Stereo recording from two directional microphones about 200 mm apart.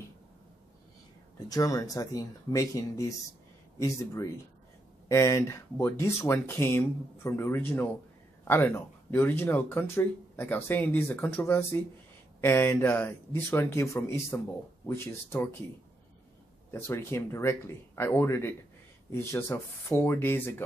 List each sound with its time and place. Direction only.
1.5 s speech: 15° left (ahead or behind)
16.7 s speech: 10° left (ahead or behind)